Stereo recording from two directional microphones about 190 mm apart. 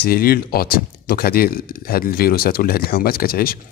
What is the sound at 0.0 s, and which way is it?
Speech, 50° left (ahead or behind).